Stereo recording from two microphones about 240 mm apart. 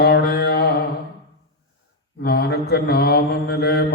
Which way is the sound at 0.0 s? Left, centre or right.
Left.